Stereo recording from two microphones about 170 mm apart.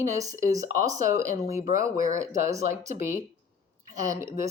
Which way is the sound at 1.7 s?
20° right (ahead or behind).